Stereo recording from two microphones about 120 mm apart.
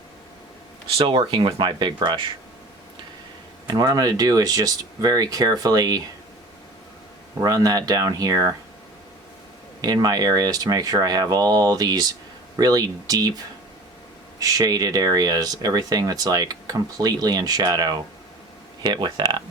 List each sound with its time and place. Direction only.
0.9 s speech: 45° right (ahead or behind)
3.7 s speech: 35° right (ahead or behind)
7.4 s speech: 30° right (ahead or behind)
9.8 s speech: 35° right (ahead or behind)
14.3 s speech: 30° right (ahead or behind)